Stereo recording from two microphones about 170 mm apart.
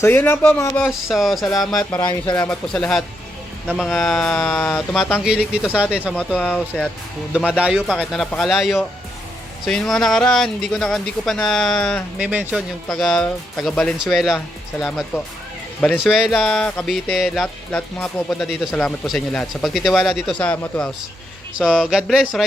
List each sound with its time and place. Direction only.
0.0 s speech: 10° left (ahead or behind)
0.9 s speech: centre (ahead or behind)
2.0 s speech: 25° left (ahead or behind)
2.3 s speech: 10° left (ahead or behind)
5.2 s speech: 5° right (ahead or behind)
6.1 s speech: 10° left (ahead or behind)
7.6 s speech: 5° right (ahead or behind)
12.2 s speech: 10° right (ahead or behind)
12.9 s speech: 5° left (ahead or behind)